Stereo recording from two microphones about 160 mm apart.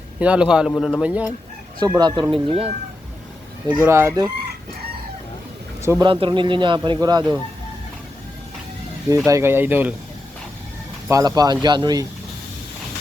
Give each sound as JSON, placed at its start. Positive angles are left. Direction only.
{"t": 0.2, "sound": "speech", "side_deg": -5}
{"t": 1.0, "sound": "speech", "side_deg": -10}
{"t": 2.0, "sound": "speech", "side_deg": -25}
{"t": 3.8, "sound": "speech", "side_deg": -15}
{"t": 5.8, "sound": "speech", "side_deg": -15}
{"t": 6.1, "sound": "speech", "side_deg": -30}
{"t": 9.0, "sound": "speech", "side_deg": -20}
{"t": 11.1, "sound": "speech", "side_deg": -25}